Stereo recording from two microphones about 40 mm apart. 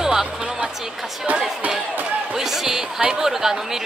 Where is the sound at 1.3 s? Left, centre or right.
Right.